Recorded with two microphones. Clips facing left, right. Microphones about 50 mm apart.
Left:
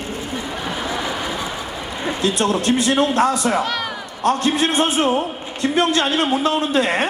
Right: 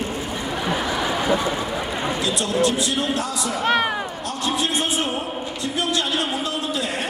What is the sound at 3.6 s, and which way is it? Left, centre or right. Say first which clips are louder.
Speech: right 5 dB; right.